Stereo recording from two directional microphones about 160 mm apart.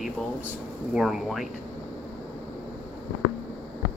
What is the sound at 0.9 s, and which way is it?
Speech, centre (ahead or behind).